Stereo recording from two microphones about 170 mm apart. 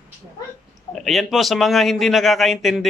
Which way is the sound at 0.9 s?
Centre (ahead or behind).